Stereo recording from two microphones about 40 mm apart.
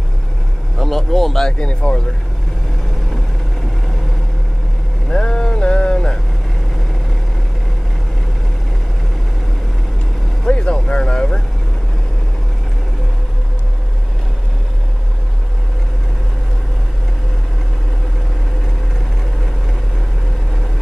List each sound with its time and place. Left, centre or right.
0.7 s speech: centre
1.6 s speech: left
5.1 s a sound: centre
10.4 s speech: left